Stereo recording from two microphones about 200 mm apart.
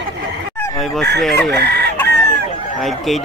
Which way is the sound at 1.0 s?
55° right (ahead or behind).